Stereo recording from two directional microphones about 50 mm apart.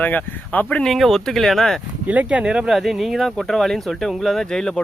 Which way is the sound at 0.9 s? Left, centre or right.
Centre.